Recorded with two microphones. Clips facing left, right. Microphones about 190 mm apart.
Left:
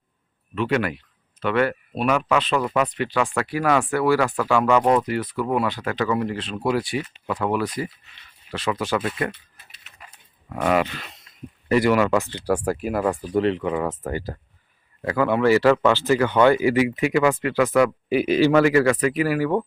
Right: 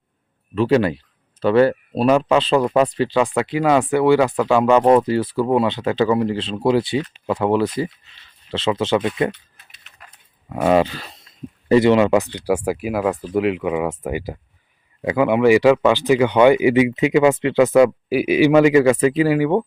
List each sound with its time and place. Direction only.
0.5 s speech: 30° right (ahead or behind)
9.7 s a sound: 5° left (ahead or behind)
10.5 s speech: 25° right (ahead or behind)
11.7 s speech: 25° right (ahead or behind)
18.1 s speech: 10° right (ahead or behind)